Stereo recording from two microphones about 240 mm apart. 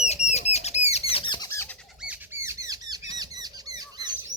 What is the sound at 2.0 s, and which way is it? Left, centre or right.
Rodents, centre.